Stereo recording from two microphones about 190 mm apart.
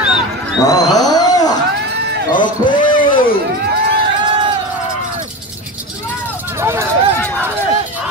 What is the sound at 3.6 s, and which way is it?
Run, 55° right (ahead or behind).